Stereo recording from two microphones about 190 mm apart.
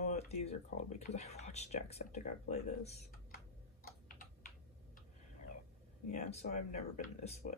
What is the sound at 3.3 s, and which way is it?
Tick-tock, 50° left (ahead or behind).